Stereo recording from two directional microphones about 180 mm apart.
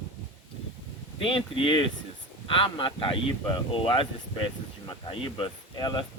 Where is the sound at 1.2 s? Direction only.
30° left (ahead or behind).